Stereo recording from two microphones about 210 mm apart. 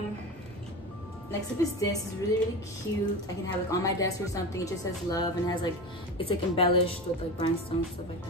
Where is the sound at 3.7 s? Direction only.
15° left (ahead or behind).